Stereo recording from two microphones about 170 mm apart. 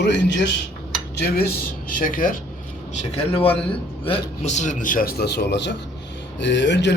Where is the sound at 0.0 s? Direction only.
90° left.